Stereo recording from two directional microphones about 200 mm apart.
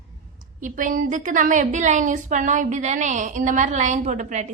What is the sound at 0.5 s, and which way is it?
A woman's voice, 40° right (ahead or behind).